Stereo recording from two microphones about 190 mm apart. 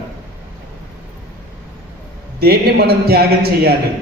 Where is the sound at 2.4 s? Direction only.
55° right (ahead or behind).